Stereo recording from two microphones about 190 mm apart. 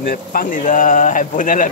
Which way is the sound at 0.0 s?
50° left (ahead or behind).